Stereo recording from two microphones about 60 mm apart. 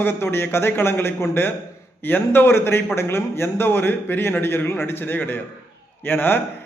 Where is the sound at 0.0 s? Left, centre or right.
Left.